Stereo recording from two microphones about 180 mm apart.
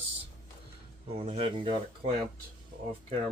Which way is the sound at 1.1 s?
35° right (ahead or behind).